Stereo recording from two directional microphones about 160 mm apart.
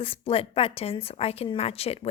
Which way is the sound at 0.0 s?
35° left (ahead or behind).